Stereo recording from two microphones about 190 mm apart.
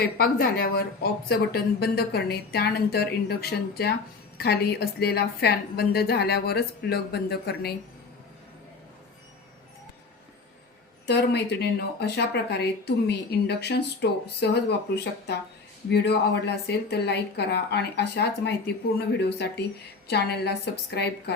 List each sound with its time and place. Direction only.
0.2 s a woman's voice: 50° left (ahead or behind)
4.4 s a woman's voice: 55° left (ahead or behind)
11.0 s a woman's voice: 60° left (ahead or behind)